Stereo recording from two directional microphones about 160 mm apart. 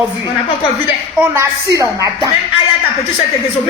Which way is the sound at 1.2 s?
15° right (ahead or behind).